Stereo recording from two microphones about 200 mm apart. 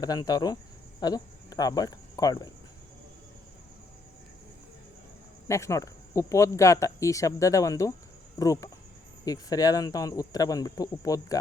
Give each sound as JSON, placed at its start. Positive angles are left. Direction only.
{"t": 0.0, "sound": "speech", "side_deg": 20}
{"t": 5.5, "sound": "speech", "side_deg": 15}